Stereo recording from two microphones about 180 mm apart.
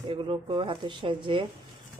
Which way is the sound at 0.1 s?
30° right (ahead or behind).